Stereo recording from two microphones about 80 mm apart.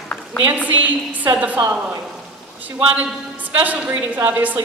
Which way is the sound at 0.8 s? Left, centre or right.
Centre.